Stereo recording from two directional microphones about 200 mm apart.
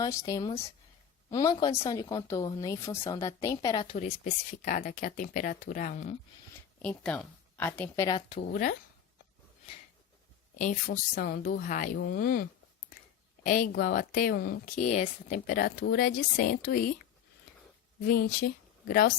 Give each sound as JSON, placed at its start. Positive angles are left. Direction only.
{"t": 0.0, "sound": "a woman's voice", "side_deg": 15}
{"t": 3.9, "sound": "speech", "side_deg": 35}
{"t": 6.8, "sound": "a woman's voice", "side_deg": 5}
{"t": 8.3, "sound": "speech", "side_deg": 40}
{"t": 10.6, "sound": "speech", "side_deg": 40}
{"t": 18.0, "sound": "speech", "side_deg": 50}